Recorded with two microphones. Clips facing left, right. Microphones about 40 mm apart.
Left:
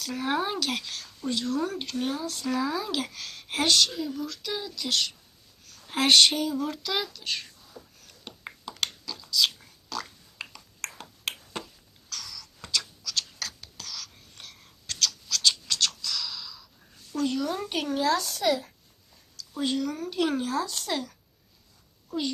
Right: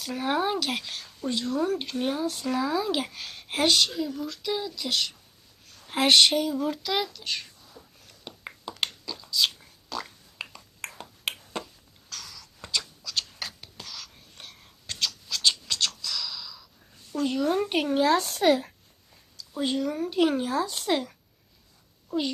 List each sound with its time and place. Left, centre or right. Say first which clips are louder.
0.0 s speech: right 2 dB; centre
2.9 s speech: right 2 dB; centre
3.4 s speech: right 1 dB; centre
8.2 s a sound: right 1 dB; centre
9.0 s a sound: left 1 dB; centre
10.5 s finger snapping: even; centre
10.9 s finger snapping: right 3 dB; centre
12.0 s a sound: left 1 dB; centre
13.1 s whispering: even; centre
17.2 s speech: even; centre
17.4 s speech: right 5 dB; right
19.5 s speech: right 1 dB; centre